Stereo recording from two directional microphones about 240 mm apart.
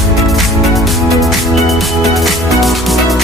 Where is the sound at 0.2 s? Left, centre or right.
Centre.